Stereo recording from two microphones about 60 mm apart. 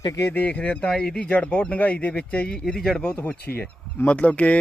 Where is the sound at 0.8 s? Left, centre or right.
Centre.